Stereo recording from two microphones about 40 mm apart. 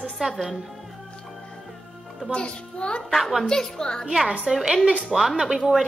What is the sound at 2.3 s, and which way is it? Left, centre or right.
Speech, left.